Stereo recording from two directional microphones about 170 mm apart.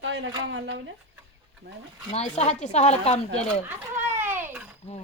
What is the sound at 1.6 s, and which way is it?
Speech, 75° right (ahead or behind).